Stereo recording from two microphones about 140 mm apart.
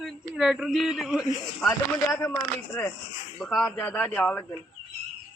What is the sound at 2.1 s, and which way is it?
Speech, 20° left (ahead or behind).